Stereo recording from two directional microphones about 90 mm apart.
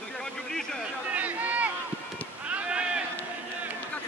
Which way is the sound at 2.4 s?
10° right (ahead or behind).